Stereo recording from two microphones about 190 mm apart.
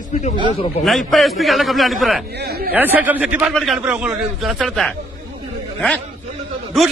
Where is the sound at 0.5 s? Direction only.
30° left (ahead or behind).